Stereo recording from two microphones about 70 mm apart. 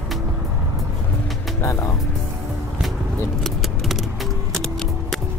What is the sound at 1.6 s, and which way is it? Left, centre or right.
Music, left.